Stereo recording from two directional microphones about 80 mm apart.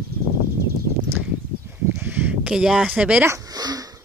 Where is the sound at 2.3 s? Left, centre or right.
Centre.